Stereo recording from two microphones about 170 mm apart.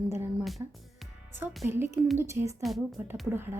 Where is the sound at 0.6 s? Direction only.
20° right (ahead or behind).